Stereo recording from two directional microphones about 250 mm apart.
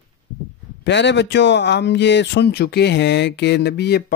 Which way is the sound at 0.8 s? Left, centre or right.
Left.